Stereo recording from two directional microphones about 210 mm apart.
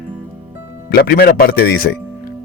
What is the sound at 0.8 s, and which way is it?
Speech, 45° left (ahead or behind).